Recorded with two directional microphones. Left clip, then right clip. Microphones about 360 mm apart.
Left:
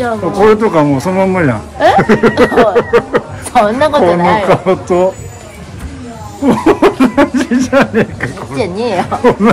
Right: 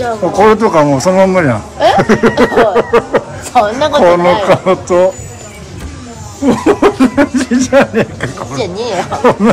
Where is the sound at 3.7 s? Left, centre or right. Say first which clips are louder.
Left 1 dB; centre.